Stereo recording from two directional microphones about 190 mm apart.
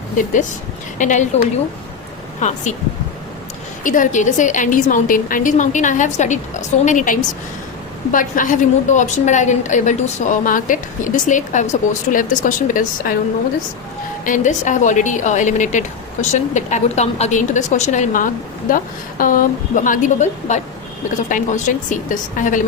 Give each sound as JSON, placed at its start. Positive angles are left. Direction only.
{"t": 0.9, "sound": "a woman's voice", "side_deg": 40}
{"t": 2.4, "sound": "a woman's voice", "side_deg": 40}
{"t": 3.8, "sound": "a woman's voice", "side_deg": 45}
{"t": 14.3, "sound": "a woman's voice", "side_deg": 40}